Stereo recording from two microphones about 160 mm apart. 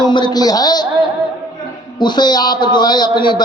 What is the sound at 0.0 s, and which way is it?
Speech, 25° left (ahead or behind).